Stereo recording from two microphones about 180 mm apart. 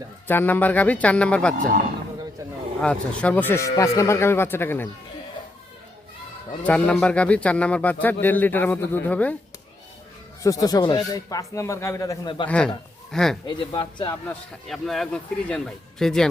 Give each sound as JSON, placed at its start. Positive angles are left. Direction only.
{"t": 0.3, "sound": "speech", "side_deg": 10}
{"t": 2.8, "sound": "speech", "side_deg": 5}
{"t": 6.6, "sound": "speech", "side_deg": 5}
{"t": 10.4, "sound": "speech", "side_deg": 20}
{"t": 12.5, "sound": "speech", "side_deg": 5}
{"t": 13.5, "sound": "speech", "side_deg": 25}
{"t": 14.7, "sound": "speech", "side_deg": 0}